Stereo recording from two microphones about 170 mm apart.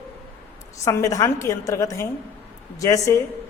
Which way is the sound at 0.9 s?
20° left (ahead or behind).